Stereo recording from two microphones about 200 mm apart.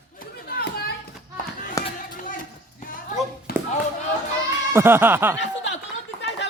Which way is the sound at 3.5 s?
50° left (ahead or behind).